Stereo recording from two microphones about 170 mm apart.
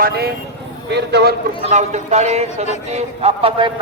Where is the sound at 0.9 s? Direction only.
75° right (ahead or behind).